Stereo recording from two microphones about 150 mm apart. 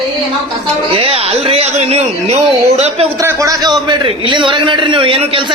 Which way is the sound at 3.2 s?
20° right (ahead or behind).